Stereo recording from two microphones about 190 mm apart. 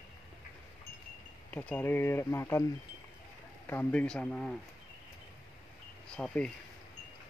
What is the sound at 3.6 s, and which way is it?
Speech, 10° left (ahead or behind).